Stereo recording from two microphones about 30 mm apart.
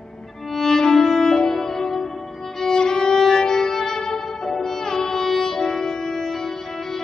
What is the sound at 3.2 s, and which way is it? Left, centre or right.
Music, centre.